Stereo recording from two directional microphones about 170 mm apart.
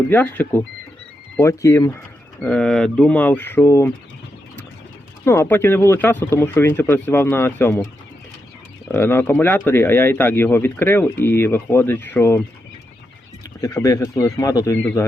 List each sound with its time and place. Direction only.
0.1 s speech: 10° left (ahead or behind)
2.4 s speech: 5° left (ahead or behind)
5.2 s speech: 15° left (ahead or behind)
8.9 s speech: 15° left (ahead or behind)
13.6 s speech: 20° left (ahead or behind)
14.8 s speech: 10° left (ahead or behind)